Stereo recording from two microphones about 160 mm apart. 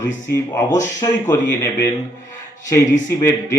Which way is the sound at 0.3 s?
15° left (ahead or behind).